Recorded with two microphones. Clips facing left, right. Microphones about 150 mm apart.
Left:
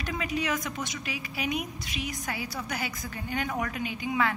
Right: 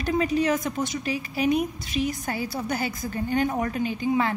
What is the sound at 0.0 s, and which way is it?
A woman's voice, 35° right (ahead or behind).